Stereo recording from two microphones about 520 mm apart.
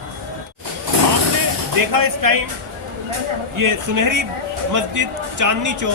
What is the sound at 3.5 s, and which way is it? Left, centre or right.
A man's voice, right.